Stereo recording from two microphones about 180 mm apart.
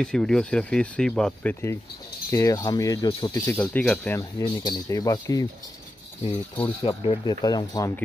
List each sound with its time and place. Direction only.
0.0 s speech: 5° left (ahead or behind)
4.2 s speech: 20° left (ahead or behind)
6.5 s speech: 30° left (ahead or behind)